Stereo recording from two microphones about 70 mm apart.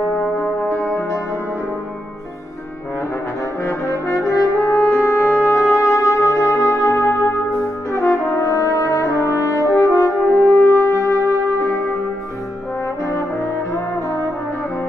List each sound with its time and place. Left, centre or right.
0.4 s music: left
3.6 s brass instrument: left
4.6 s music: left
7.9 s brass instrument: left
9.8 s french horn: left